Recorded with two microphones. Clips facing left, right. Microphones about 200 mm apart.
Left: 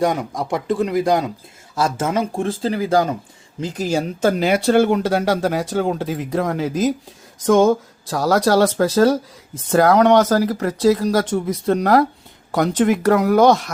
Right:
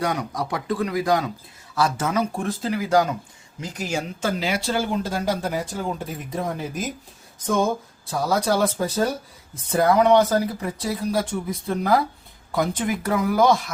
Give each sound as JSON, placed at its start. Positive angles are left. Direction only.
{"t": 0.0, "sound": "speech", "side_deg": 25}
{"t": 4.2, "sound": "speech", "side_deg": 50}